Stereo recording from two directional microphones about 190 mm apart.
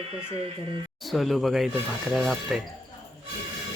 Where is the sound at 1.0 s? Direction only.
Centre (ahead or behind).